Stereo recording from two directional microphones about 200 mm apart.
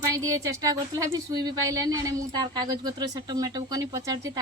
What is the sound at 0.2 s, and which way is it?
Speech, 15° right (ahead or behind).